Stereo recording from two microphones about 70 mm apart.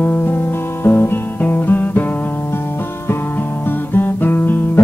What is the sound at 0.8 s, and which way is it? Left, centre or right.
Guitar, left.